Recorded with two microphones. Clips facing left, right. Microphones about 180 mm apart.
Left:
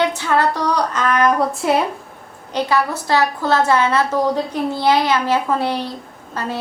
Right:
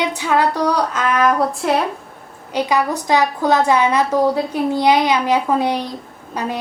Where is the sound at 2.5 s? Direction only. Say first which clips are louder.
Right 1 dB; 15° right (ahead or behind).